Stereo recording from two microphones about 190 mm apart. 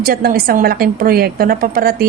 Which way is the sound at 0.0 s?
50° right (ahead or behind).